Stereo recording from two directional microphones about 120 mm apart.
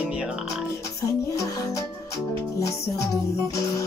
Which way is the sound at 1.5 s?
30° left (ahead or behind).